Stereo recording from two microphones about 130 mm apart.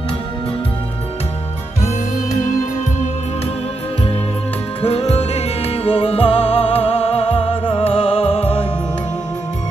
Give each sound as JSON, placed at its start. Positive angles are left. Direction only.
{"t": 4.8, "sound": "music", "side_deg": 55}